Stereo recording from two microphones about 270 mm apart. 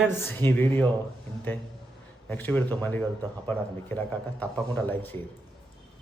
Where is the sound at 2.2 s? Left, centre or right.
Centre.